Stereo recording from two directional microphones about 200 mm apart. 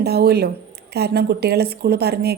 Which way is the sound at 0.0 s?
55° right (ahead or behind).